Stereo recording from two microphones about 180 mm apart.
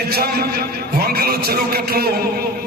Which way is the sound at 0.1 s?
60° right (ahead or behind).